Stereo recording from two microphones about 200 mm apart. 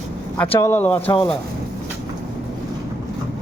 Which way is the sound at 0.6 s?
10° left (ahead or behind).